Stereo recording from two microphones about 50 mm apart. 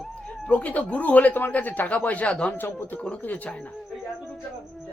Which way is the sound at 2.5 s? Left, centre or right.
Left.